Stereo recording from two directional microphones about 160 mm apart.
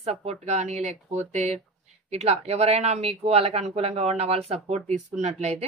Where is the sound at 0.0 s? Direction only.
40° right (ahead or behind).